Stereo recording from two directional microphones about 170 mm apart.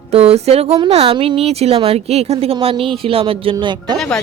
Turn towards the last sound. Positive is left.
turn(degrees=0)  # may be behind; listen again after turning